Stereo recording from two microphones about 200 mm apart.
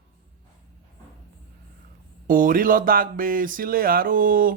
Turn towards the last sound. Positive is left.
turn(degrees=-45)  # may be behind; listen again after turning